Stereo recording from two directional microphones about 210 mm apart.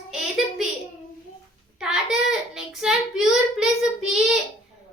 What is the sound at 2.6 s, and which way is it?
Child singing, centre (ahead or behind).